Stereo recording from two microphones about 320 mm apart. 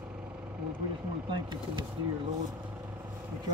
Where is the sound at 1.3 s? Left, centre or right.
Centre.